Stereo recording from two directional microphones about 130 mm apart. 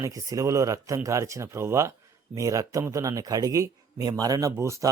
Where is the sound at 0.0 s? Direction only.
25° right (ahead or behind).